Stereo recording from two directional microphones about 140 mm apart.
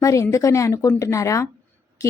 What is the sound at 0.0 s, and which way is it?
A woman's voice, 25° left (ahead or behind).